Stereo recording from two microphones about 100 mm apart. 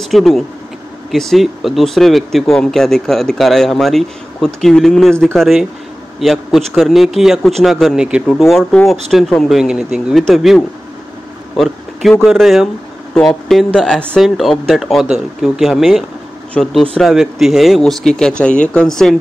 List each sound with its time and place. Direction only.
0.0 s speech: centre (ahead or behind)
16.5 s speech: 10° left (ahead or behind)